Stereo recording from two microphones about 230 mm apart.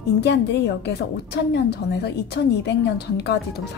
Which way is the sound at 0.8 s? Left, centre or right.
Left.